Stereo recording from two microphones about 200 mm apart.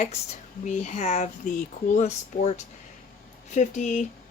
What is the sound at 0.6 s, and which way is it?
Speech, 35° left (ahead or behind).